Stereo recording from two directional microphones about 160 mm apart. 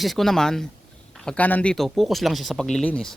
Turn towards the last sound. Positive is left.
turn(degrees=5)  # may be behind; listen again after turning